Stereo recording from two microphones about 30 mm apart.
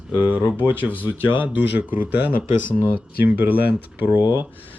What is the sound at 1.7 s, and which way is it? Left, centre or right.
Speech, right.